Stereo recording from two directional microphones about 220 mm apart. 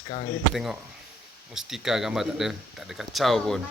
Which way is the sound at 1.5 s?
Centre (ahead or behind).